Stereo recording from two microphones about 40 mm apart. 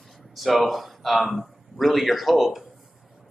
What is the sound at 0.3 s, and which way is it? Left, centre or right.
A man's voice, centre.